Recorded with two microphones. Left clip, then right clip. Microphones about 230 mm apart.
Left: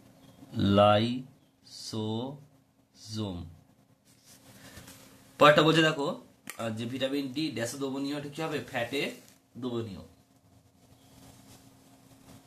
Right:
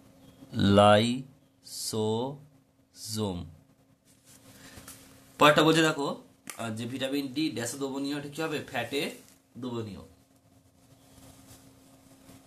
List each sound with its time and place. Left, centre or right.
0.5 s speech: right
5.4 s speech: centre